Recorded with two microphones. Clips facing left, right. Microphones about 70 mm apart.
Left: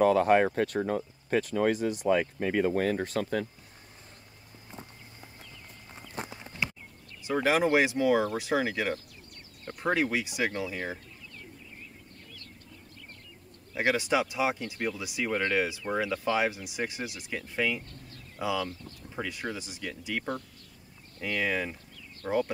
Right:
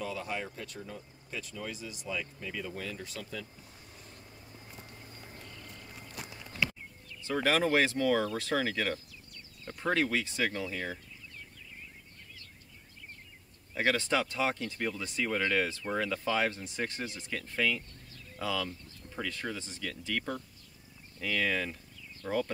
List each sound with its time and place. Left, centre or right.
0.0 s speech: left
6.1 s clip-clop: left
7.2 s speech: centre
13.7 s speech: centre